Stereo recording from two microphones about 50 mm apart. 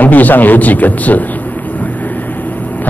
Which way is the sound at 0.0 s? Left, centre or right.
Left.